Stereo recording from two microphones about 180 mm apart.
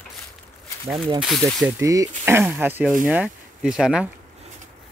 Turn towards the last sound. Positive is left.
turn(degrees=-5)  # may be behind; listen again after turning